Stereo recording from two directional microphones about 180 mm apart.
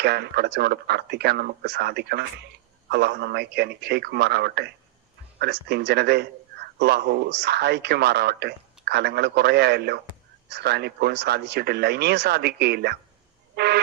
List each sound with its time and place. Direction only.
0.0 s a man's voice: 65° right (ahead or behind)
13.6 s train: 65° right (ahead or behind)